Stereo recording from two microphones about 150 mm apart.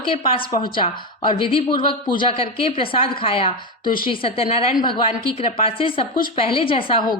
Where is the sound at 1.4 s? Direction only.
35° left (ahead or behind).